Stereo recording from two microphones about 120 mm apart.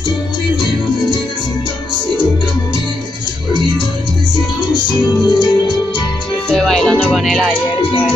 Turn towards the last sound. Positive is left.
turn(degrees=0)  # may be behind; listen again after turning